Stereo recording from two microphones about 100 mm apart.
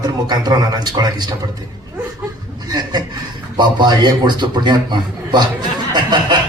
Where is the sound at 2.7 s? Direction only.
45° right (ahead or behind).